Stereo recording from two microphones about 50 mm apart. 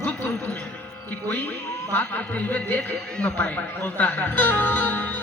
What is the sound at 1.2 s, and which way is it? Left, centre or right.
Speech, left.